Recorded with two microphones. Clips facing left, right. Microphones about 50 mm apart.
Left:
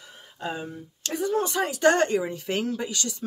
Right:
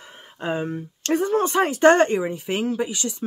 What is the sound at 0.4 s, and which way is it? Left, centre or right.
Speech, right.